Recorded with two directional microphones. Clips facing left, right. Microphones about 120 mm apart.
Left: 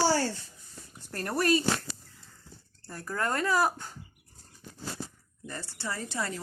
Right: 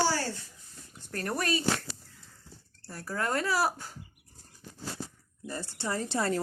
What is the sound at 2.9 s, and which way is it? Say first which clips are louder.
Speech: even; 5° right (ahead or behind).